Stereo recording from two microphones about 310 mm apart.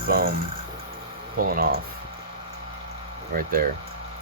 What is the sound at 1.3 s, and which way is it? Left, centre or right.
Speech, right.